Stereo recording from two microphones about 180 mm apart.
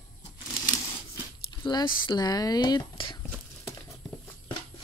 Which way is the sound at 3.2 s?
15° left (ahead or behind).